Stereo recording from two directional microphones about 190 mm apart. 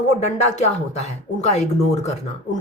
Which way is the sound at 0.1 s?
35° left (ahead or behind).